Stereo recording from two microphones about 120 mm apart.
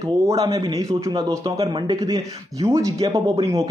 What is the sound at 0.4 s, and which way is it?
Speech, 30° right (ahead or behind).